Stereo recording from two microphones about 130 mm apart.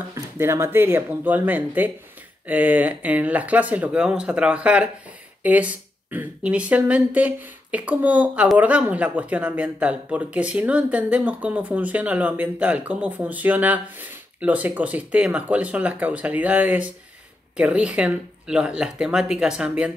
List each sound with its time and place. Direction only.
0.1 s speech: 20° right (ahead or behind)